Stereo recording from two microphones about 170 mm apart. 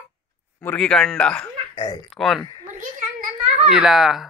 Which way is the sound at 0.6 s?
5° left (ahead or behind).